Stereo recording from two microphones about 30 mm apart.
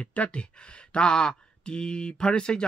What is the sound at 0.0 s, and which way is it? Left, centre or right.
Speech, left.